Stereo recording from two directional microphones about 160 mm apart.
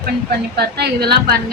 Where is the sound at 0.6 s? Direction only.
90° right.